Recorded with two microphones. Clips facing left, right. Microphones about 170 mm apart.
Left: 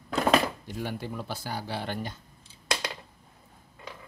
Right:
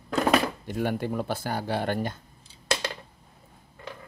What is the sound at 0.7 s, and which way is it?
Speech, 55° right (ahead or behind).